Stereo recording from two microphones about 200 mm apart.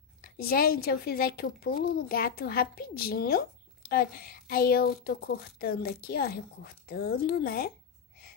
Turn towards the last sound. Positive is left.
turn(degrees=50)  # may be behind; listen again after turning